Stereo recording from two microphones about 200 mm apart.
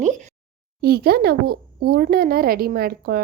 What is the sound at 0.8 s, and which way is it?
A woman's voice, 50° right (ahead or behind).